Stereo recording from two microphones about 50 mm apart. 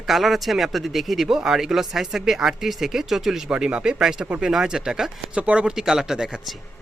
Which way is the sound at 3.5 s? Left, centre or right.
Centre.